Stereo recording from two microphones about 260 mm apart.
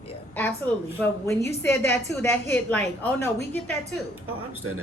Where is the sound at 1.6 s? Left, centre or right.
Centre.